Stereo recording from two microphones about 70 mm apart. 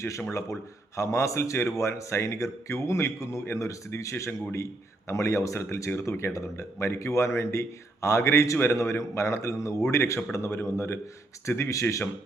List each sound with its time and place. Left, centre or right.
0.2 s a man's voice: left